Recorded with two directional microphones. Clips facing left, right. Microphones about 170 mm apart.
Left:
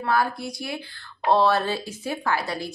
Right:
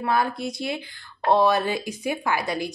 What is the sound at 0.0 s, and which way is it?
A woman's voice, 20° right (ahead or behind).